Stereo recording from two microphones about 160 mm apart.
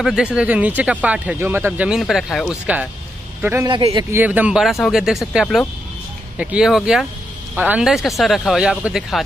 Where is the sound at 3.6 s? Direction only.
30° right (ahead or behind).